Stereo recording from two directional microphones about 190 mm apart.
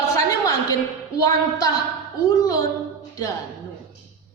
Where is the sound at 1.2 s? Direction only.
20° left (ahead or behind).